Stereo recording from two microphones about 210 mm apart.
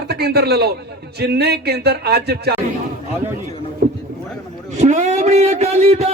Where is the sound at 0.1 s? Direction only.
50° right (ahead or behind).